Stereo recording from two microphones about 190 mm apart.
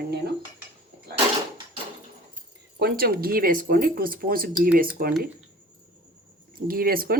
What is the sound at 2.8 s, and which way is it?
Speech, 55° right (ahead or behind).